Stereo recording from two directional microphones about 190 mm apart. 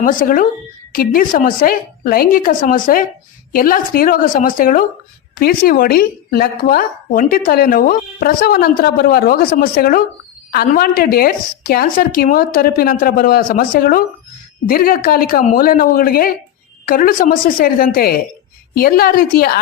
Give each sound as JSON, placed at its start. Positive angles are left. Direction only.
{"t": 0.0, "sound": "a woman's voice", "side_deg": 45}